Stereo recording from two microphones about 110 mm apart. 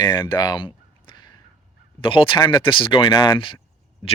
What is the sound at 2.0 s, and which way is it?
Speech, 50° left (ahead or behind).